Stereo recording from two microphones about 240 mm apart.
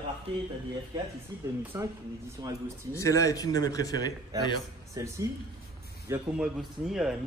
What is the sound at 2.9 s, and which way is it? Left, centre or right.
A man's voice, centre.